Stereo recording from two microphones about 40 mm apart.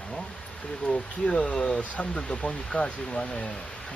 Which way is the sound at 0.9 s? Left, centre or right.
Left.